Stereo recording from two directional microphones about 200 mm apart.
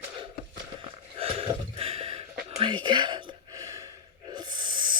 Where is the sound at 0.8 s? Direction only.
30° right (ahead or behind).